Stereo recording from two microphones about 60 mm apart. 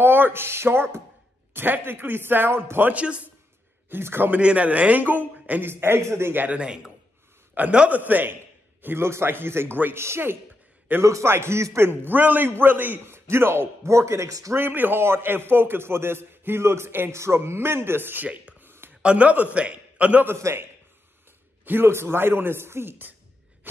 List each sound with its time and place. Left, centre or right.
0.0 s a man's voice: right
2.9 s a man's voice: right
3.9 s a man's voice: right
4.4 s a man's voice: right
5.7 s a man's voice: right
6.6 s a man's voice: centre; by 8.4 s right
8.8 s a man's voice: right
10.9 s a man's voice: right
11.2 s speech: right
12.0 s a man's voice: right
14.5 s a man's voice: right
18.7 s a sound: right
19.0 s a man's voice: right
21.6 s a man's voice: right